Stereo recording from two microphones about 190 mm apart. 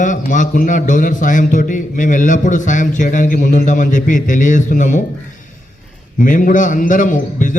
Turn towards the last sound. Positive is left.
turn(degrees=45)  # may be behind; listen again after turning